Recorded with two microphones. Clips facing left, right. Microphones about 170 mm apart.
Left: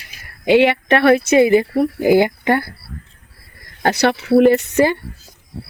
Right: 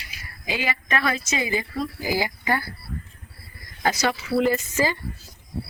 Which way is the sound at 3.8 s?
65° left (ahead or behind).